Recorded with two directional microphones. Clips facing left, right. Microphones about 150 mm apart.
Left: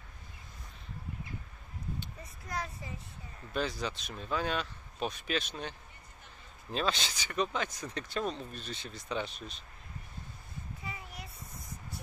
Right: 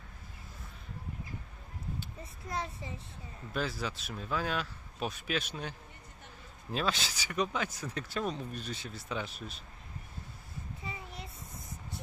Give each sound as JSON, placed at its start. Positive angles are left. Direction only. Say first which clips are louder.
{"t": 2.4, "sound": "a child's voice", "louder": "right 1 dB", "side_deg": -25}
{"t": 3.5, "sound": "speech", "louder": "left 1 dB", "side_deg": -5}
{"t": 10.8, "sound": "a sound", "louder": "right 1 dB", "side_deg": -25}